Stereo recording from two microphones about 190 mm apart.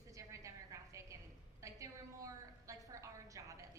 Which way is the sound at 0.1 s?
15° right (ahead or behind).